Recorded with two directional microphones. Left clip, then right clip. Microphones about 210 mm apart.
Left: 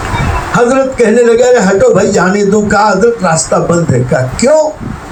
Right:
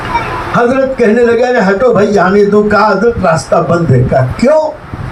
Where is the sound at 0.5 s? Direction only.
55° left (ahead or behind).